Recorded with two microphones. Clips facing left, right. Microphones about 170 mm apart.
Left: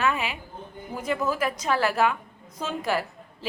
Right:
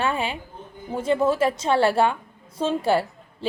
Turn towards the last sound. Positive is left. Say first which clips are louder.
# right 5 dB
turn(degrees=-30)  # may be behind; listen again after turning